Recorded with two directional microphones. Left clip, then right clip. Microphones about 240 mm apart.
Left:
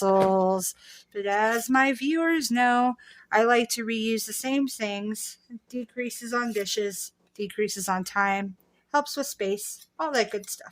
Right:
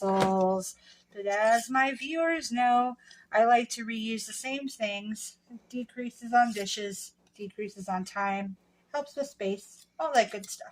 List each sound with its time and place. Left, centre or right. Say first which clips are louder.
0.0 s a sound: left 5 dB; left
1.1 s speech: left 1 dB; left
10.0 s speech: even; left